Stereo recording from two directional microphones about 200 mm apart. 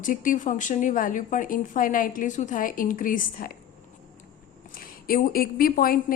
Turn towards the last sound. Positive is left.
turn(degrees=45)  # may be behind; listen again after turning